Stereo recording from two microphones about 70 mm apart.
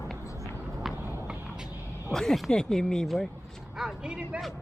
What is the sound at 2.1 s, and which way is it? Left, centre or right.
Speech, centre.